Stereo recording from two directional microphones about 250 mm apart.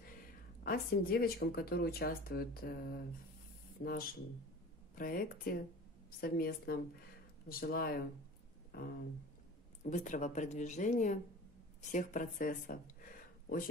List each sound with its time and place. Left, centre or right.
0.7 s speech: left
3.8 s speech: left
8.7 s a sound: left
9.8 s speech: left